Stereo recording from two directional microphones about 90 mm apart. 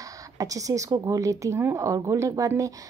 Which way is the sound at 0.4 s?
40° right (ahead or behind).